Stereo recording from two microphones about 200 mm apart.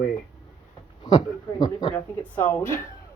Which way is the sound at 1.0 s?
20° left (ahead or behind).